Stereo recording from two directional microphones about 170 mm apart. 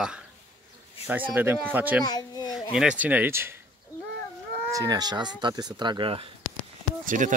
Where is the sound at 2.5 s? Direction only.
5° right (ahead or behind).